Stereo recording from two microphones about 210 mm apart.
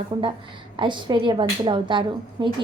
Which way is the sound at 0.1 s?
20° right (ahead or behind).